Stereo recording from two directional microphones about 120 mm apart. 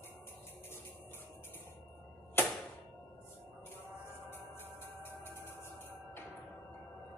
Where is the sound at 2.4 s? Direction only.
20° left (ahead or behind).